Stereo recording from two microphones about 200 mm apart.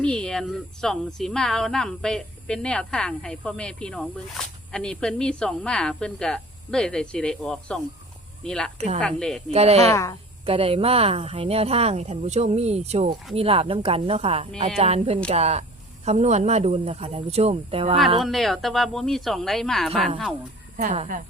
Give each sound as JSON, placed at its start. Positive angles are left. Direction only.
{"t": 0.0, "sound": "a woman's voice", "side_deg": 5}
{"t": 9.5, "sound": "speech", "side_deg": -30}
{"t": 9.9, "sound": "a woman's voice", "side_deg": 15}
{"t": 10.4, "sound": "speech", "side_deg": -30}
{"t": 18.2, "sound": "a woman's voice", "side_deg": 0}
{"t": 20.7, "sound": "speech", "side_deg": -35}